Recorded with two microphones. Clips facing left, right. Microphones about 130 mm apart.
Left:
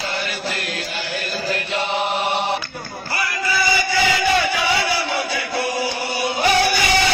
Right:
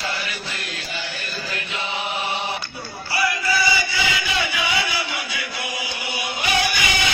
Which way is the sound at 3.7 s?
50° left (ahead or behind).